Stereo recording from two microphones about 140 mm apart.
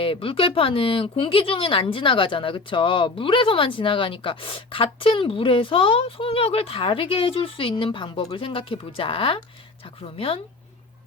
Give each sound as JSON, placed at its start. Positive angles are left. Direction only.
{"t": 0.0, "sound": "speech", "side_deg": 40}